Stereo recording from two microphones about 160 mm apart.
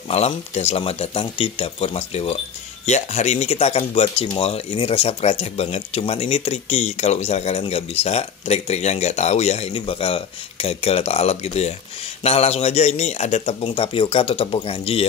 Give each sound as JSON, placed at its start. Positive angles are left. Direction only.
{"t": 0.1, "sound": "speech", "side_deg": 40}